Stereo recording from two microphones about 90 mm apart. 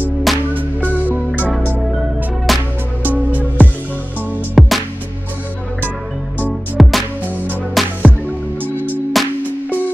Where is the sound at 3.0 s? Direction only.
20° right (ahead or behind).